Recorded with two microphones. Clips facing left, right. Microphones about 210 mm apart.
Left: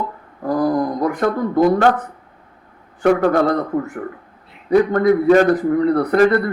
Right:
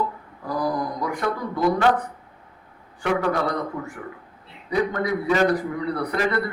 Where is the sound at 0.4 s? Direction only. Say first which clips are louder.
Left 8 dB; 50° left (ahead or behind).